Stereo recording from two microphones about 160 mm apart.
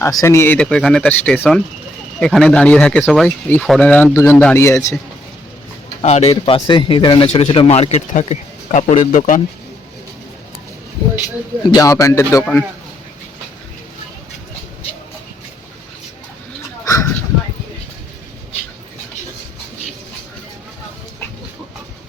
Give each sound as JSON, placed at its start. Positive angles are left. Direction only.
{"t": 0.2, "sound": "speech", "side_deg": 15}
{"t": 6.0, "sound": "a man's voice", "side_deg": 45}
{"t": 6.3, "sound": "speech", "side_deg": 30}
{"t": 11.7, "sound": "a man's voice", "side_deg": 20}
{"t": 16.8, "sound": "a sound", "side_deg": 20}